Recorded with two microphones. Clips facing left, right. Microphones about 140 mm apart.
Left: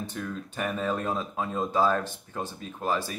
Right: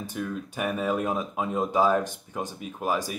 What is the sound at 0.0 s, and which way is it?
Speech, 10° right (ahead or behind).